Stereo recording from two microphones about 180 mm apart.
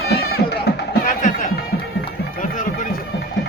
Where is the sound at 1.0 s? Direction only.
45° left (ahead or behind).